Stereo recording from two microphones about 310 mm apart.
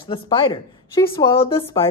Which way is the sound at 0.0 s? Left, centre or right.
Centre.